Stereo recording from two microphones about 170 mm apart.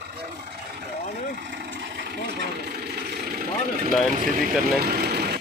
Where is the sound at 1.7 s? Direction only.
75° right (ahead or behind).